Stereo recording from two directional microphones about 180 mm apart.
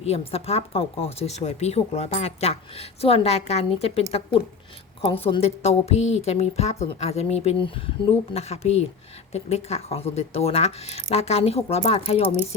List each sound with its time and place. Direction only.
0.0 s speech: 35° left (ahead or behind)